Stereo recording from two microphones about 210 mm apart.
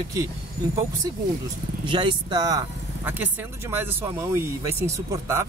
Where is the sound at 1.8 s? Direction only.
25° right (ahead or behind).